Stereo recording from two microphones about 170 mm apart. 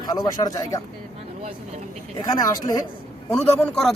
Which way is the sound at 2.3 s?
20° left (ahead or behind).